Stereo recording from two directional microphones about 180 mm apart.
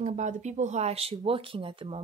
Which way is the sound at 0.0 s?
40° right (ahead or behind).